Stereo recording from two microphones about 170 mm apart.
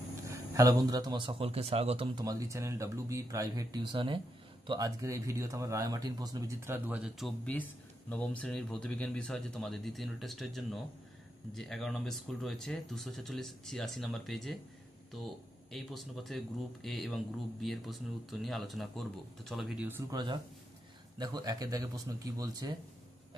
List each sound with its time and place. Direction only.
0.3 s speech: 20° right (ahead or behind); by 2.0 s 35° right (ahead or behind)
2.1 s a man's voice: 20° right (ahead or behind); by 14.6 s centre (ahead or behind)
15.7 s a man's voice: centre (ahead or behind)
20.1 s speech: 25° right (ahead or behind)